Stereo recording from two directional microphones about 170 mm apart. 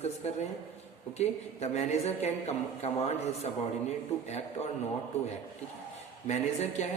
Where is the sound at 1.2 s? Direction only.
40° left (ahead or behind).